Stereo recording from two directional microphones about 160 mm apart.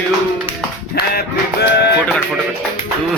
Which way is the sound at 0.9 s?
85° left.